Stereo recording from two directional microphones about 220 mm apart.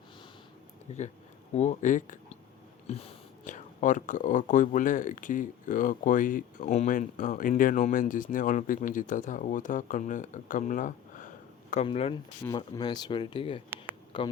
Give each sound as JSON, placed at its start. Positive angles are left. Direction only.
{"t": 0.9, "sound": "speech", "side_deg": 30}
{"t": 12.5, "sound": "speech", "side_deg": 15}